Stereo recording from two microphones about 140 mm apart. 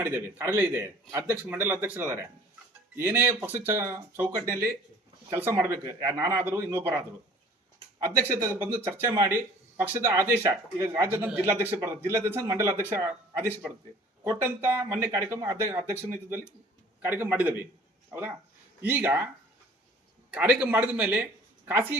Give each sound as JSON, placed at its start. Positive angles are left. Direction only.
{"t": 0.0, "sound": "speech", "side_deg": -15}
{"t": 20.3, "sound": "speech", "side_deg": -10}